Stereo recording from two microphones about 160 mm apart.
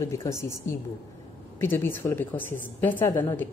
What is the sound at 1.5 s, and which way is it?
Speech, 15° left (ahead or behind).